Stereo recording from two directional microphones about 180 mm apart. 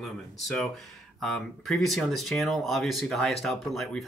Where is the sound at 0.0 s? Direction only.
Centre (ahead or behind).